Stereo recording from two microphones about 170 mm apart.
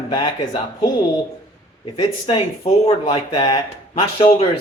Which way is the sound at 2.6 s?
40° left (ahead or behind).